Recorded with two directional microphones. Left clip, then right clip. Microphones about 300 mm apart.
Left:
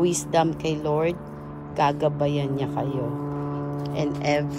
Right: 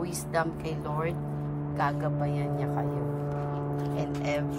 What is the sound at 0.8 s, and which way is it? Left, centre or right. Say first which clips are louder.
Speech: left 8 dB; left.